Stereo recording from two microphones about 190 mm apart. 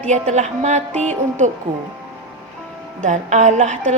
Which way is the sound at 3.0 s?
40° right (ahead or behind).